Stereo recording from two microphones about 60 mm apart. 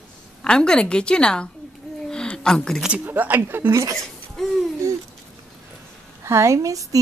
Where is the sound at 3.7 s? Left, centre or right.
Right.